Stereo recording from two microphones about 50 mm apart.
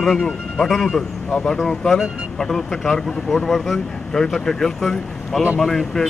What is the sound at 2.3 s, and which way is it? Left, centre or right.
Speech, centre.